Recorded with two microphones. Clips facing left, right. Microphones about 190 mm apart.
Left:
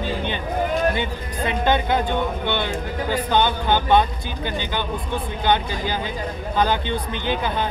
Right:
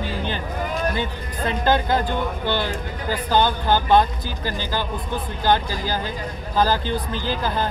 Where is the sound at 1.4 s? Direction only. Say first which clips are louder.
Even; 5° right (ahead or behind).